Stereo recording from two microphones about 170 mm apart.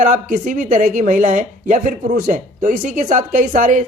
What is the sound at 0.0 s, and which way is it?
Speech, 50° right (ahead or behind).